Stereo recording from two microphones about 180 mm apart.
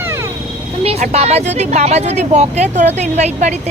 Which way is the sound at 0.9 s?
35° right (ahead or behind).